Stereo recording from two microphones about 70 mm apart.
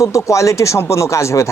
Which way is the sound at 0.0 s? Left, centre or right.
Left.